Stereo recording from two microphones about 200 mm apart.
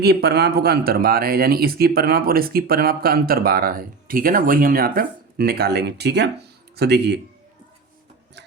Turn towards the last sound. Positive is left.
turn(degrees=-55)  # may be behind; listen again after turning